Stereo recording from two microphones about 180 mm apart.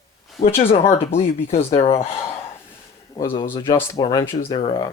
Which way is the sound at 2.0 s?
15° left (ahead or behind).